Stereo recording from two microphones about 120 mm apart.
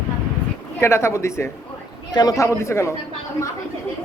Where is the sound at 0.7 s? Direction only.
20° left (ahead or behind).